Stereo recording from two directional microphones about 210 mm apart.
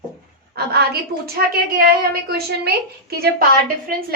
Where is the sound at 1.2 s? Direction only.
45° right (ahead or behind).